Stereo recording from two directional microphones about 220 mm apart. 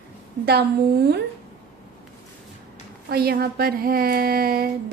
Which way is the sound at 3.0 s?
45° right (ahead or behind).